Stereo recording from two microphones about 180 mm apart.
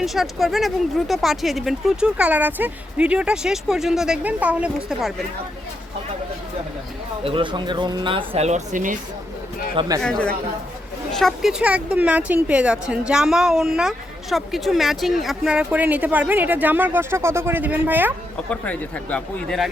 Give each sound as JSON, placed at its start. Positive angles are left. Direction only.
{"t": 0.0, "sound": "speech", "side_deg": 0}
{"t": 7.3, "sound": "speech", "side_deg": -25}
{"t": 10.0, "sound": "speech", "side_deg": 5}
{"t": 18.4, "sound": "speech", "side_deg": 5}